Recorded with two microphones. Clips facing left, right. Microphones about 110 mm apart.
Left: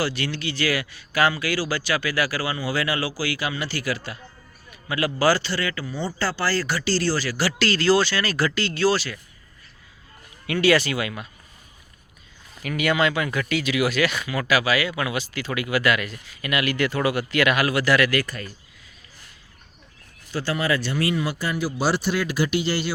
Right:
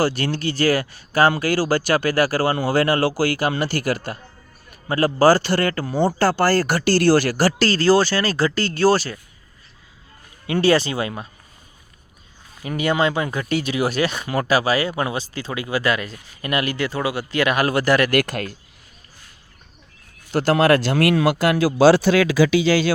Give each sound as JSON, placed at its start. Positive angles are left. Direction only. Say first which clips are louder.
{"t": 0.0, "sound": "speech", "louder": "right 5 dB", "side_deg": -40}
{"t": 10.4, "sound": "speech", "louder": "right 2 dB", "side_deg": -30}
{"t": 12.6, "sound": "speech", "louder": "right 2 dB", "side_deg": -25}
{"t": 18.2, "sound": "speech", "louder": "right 7 dB", "side_deg": -85}
{"t": 20.3, "sound": "speech", "louder": "right 8 dB", "side_deg": -65}